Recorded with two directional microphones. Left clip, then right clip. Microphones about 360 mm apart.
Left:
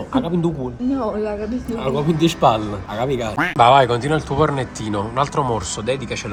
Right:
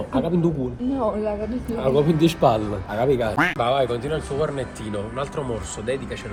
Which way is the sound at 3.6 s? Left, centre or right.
Centre.